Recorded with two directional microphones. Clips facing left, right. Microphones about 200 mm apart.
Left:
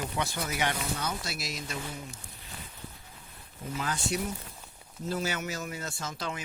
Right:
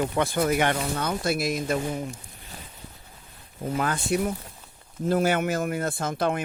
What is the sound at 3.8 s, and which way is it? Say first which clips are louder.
Speech: right 7 dB; 55° right (ahead or behind).